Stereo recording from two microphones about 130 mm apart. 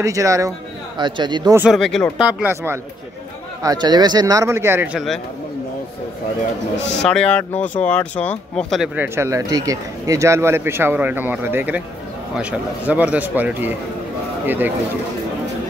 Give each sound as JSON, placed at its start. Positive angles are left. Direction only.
{"t": 0.0, "sound": "speech", "side_deg": -25}
{"t": 0.9, "sound": "speech", "side_deg": -35}
{"t": 1.7, "sound": "speech", "side_deg": 5}
{"t": 2.4, "sound": "speech", "side_deg": -20}
{"t": 3.6, "sound": "speech", "side_deg": -35}
{"t": 4.9, "sound": "speech", "side_deg": 0}
{"t": 7.0, "sound": "speech", "side_deg": 5}
{"t": 8.9, "sound": "speech", "side_deg": -15}